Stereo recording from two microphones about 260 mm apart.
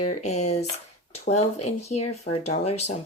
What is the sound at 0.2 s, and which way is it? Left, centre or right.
Speech, left.